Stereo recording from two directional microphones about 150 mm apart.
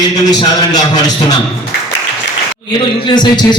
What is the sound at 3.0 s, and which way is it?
Speech, 30° left (ahead or behind).